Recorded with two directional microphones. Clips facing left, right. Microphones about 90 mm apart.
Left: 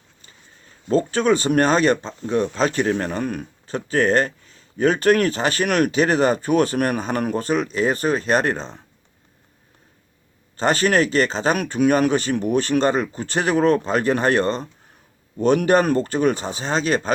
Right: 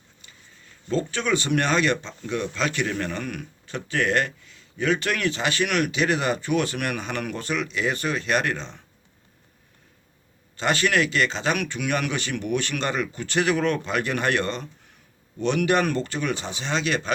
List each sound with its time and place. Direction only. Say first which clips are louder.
0.9 s speech: left 7 dB; 40° left (ahead or behind)
10.6 s speech: left 4 dB; 40° left (ahead or behind)